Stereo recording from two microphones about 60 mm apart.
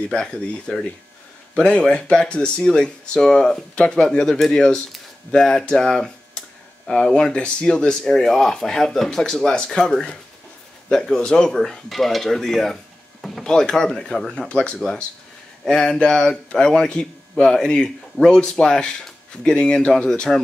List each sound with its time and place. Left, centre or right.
0.1 s speech: centre
14.5 s speech: centre